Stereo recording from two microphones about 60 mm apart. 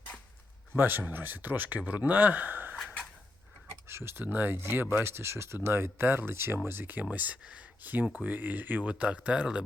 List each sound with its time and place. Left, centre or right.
0.8 s speech: right
3.8 s speech: right
6.9 s speech: right
8.9 s speech: right